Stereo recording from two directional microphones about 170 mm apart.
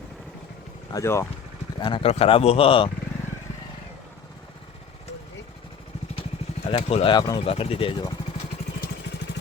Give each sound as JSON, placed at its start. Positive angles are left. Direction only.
{"t": 0.9, "sound": "speech", "side_deg": 15}
{"t": 1.8, "sound": "speech", "side_deg": 30}
{"t": 6.7, "sound": "speech", "side_deg": 35}